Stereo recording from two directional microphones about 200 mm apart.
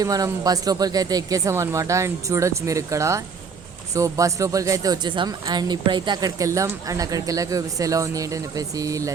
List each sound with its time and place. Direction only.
0.0 s speech: 20° right (ahead or behind)